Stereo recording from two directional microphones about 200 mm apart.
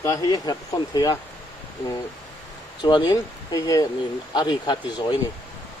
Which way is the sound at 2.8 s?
20° left (ahead or behind).